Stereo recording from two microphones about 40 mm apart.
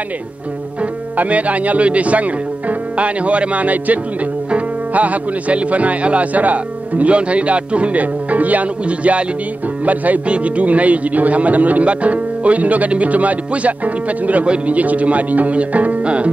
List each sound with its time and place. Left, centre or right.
1.1 s speech: right